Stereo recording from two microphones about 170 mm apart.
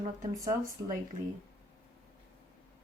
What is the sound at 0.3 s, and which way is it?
Speech, 20° right (ahead or behind).